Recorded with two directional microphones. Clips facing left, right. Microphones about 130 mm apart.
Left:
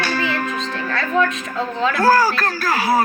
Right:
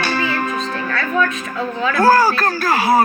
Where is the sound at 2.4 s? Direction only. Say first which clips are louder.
Right 3 dB; 20° right (ahead or behind).